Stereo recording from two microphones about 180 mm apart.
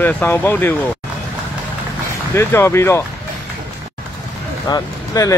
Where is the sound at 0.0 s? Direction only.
10° left (ahead or behind).